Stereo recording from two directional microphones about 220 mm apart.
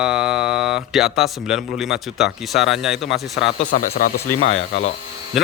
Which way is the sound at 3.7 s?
40° left (ahead or behind).